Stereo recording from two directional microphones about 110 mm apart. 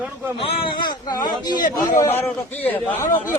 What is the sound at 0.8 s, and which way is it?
A man's voice, 40° left (ahead or behind).